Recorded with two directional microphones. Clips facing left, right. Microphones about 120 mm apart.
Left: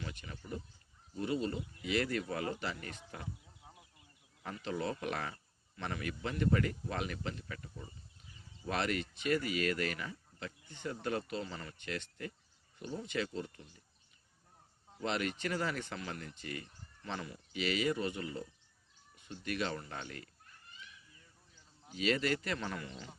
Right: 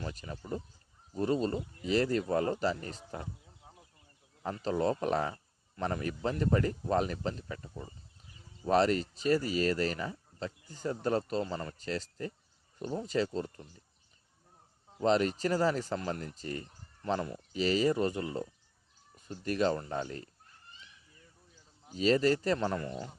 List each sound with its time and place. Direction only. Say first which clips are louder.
0.0 s speech: right 5 dB; 35° right (ahead or behind)
4.4 s speech: right 7 dB; 35° right (ahead or behind)
15.0 s speech: right 8 dB; 35° right (ahead or behind)
19.1 s cat: right 5 dB; 40° right (ahead or behind)
21.9 s speech: right 7 dB; 35° right (ahead or behind)